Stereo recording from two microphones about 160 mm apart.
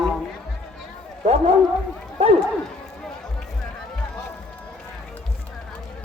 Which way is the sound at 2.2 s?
40° right (ahead or behind).